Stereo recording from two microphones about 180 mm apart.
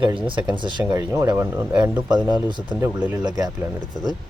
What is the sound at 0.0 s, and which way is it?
Speech, 25° right (ahead or behind).